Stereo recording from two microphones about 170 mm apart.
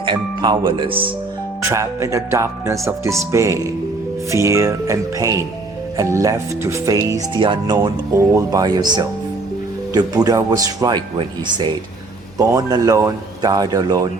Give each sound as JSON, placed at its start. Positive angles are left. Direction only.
{"t": 0.0, "sound": "speech", "side_deg": -30}
{"t": 1.6, "sound": "speech", "side_deg": -15}
{"t": 7.8, "sound": "speech", "side_deg": -15}